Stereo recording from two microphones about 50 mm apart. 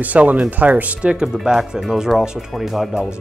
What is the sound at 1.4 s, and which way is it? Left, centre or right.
Speech, centre.